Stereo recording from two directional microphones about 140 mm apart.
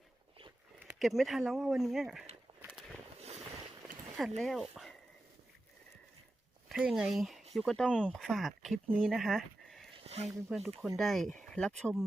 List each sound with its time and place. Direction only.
0.9 s speech: centre (ahead or behind)
2.5 s a sound: 45° right (ahead or behind)
4.4 s speech: centre (ahead or behind)
6.7 s speech: centre (ahead or behind)
10.0 s a sound: 50° right (ahead or behind)
10.2 s speech: centre (ahead or behind)